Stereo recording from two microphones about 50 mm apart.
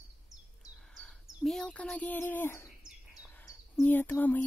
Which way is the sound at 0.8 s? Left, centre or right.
Centre.